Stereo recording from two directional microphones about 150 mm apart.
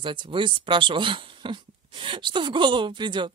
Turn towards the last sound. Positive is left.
turn(degrees=-30)  # may be behind; listen again after turning